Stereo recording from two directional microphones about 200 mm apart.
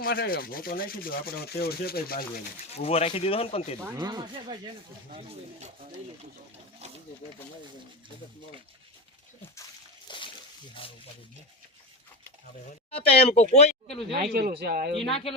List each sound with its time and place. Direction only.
0.0 s rub: 45° left (ahead or behind)
2.7 s speech: 30° left (ahead or behind)
3.8 s speech: 20° right (ahead or behind)
5.1 s speech: 35° right (ahead or behind)
10.1 s splash: 25° left (ahead or behind)
10.8 s speech: 25° left (ahead or behind)
12.9 s speech: 30° left (ahead or behind)
14.3 s speech: 50° right (ahead or behind)
15.1 s speech: 30° left (ahead or behind)